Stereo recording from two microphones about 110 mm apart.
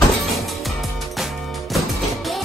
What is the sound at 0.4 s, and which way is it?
Music, centre (ahead or behind).